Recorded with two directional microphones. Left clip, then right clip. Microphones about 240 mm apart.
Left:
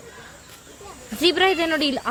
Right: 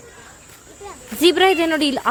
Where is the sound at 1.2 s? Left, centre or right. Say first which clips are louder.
Right 4 dB; centre.